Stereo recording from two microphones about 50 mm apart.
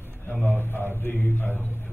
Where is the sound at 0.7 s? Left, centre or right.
Left.